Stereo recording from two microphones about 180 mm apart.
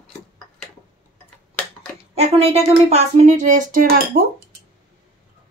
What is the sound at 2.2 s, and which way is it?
Speech, 35° right (ahead or behind).